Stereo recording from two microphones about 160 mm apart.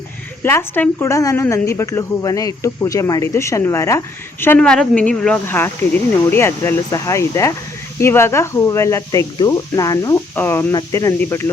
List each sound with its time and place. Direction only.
0.4 s a woman's voice: 15° left (ahead or behind)